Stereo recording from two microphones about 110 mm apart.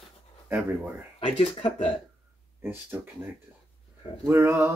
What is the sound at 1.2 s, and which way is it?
Speech, 55° left (ahead or behind).